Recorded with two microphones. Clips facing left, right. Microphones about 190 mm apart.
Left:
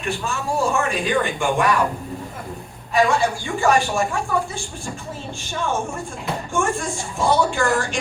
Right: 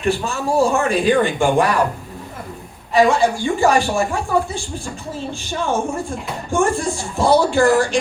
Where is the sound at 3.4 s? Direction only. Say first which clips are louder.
Right 2 dB; 35° right (ahead or behind).